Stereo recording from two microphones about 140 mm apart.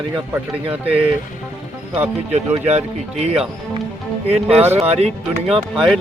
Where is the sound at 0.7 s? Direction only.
10° right (ahead or behind).